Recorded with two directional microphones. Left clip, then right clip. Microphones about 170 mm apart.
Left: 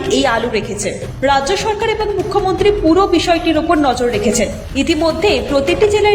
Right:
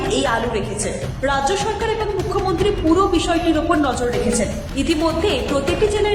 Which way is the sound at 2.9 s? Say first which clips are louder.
Left 5 dB; 20° left (ahead or behind).